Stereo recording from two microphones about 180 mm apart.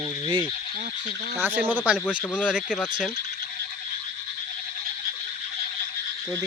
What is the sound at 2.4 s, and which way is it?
Speech, 5° right (ahead or behind).